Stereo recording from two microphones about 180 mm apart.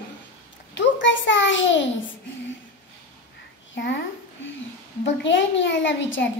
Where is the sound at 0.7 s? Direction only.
90° left.